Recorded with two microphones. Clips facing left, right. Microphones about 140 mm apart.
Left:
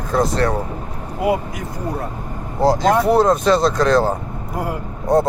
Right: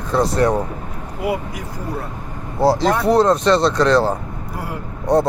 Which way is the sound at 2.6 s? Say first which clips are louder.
Left 1 dB; 5° right (ahead or behind).